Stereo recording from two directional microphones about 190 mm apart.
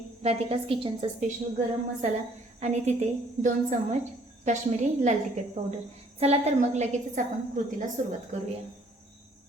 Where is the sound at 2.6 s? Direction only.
35° right (ahead or behind).